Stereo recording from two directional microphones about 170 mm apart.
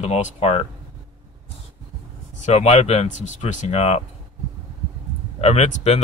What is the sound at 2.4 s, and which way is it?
Speech, 40° left (ahead or behind).